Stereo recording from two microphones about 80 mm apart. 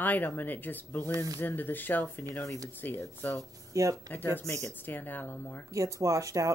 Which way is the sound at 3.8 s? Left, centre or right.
Right.